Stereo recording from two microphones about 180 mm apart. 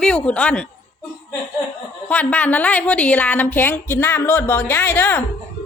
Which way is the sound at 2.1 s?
10° left (ahead or behind).